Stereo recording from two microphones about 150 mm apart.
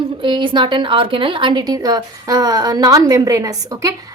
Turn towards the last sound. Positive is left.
turn(degrees=-20)  # may be behind; listen again after turning